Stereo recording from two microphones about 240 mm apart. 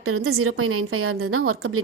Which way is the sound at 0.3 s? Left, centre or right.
Right.